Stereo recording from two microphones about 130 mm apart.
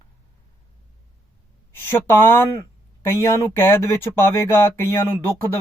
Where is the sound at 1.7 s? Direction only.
15° left (ahead or behind).